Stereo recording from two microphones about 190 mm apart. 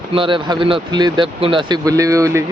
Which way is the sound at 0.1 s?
25° right (ahead or behind).